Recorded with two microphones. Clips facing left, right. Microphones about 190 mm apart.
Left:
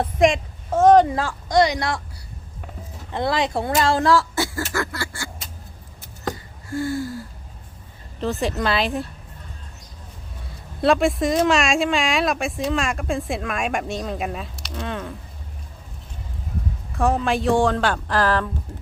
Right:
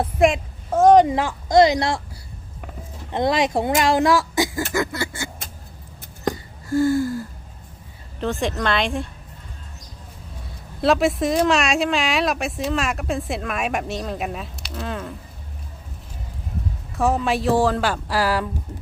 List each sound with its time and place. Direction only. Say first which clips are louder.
0.0 s a woman's voice: even; 5° right (ahead or behind); by 2.0 s 25° right (ahead or behind)
3.1 s speech: right 2 dB; 20° right (ahead or behind)
4.7 s a sound: right 3 dB; 20° right (ahead or behind)
6.7 s gasp: right 6 dB; 45° right (ahead or behind)
8.2 s speech: even; centre (ahead or behind)
10.4 s speech: even; centre (ahead or behind)
16.9 s speech: even; centre (ahead or behind)